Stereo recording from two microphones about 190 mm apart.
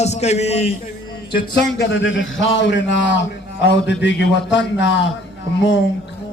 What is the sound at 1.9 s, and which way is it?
A man's voice, 80° left.